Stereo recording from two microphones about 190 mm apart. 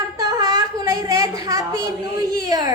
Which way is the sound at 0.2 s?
20° right (ahead or behind).